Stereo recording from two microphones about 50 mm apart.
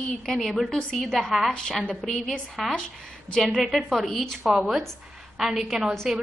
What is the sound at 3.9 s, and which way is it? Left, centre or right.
Speech, centre.